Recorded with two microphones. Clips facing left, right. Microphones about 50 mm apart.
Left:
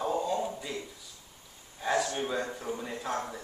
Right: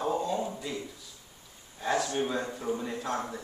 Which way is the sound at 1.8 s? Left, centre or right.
Centre.